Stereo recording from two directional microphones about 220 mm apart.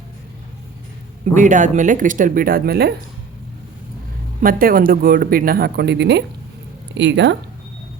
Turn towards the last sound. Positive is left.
turn(degrees=-55)  # may be behind; listen again after turning